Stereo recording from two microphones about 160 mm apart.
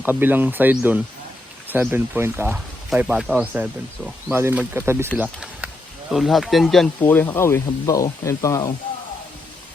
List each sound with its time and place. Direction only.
0.0 s speech: 10° right (ahead or behind)
7.0 s speech: 10° left (ahead or behind)